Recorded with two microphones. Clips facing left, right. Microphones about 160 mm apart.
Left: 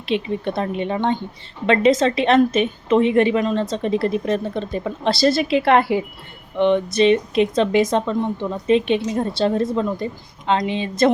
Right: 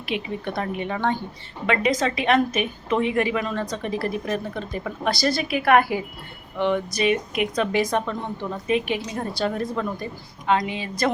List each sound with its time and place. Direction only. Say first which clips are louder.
0.0 s a woman's voice: left 6 dB; 25° left (ahead or behind)